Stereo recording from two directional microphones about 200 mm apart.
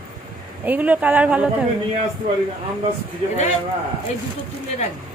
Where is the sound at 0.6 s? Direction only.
10° right (ahead or behind).